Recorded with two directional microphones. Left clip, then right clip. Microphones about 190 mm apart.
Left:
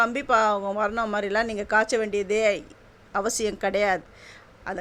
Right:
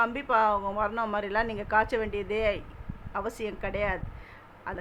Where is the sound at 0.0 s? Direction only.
25° left (ahead or behind).